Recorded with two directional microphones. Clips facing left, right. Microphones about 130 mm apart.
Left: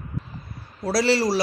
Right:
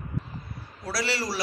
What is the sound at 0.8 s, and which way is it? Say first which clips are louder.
Speech: left 9 dB; 30° left (ahead or behind).